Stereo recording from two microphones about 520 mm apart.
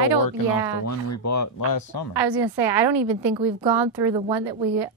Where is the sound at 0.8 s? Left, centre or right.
Left.